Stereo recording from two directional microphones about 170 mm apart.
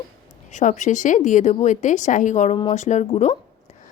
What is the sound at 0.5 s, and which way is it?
A woman's voice, 45° left (ahead or behind).